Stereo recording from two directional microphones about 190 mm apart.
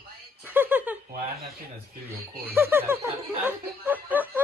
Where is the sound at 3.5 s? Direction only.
10° right (ahead or behind).